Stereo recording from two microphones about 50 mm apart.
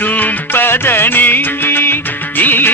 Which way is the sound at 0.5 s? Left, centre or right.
Left.